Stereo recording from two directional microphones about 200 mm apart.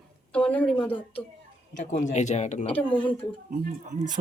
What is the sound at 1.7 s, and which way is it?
Speech, 40° left (ahead or behind).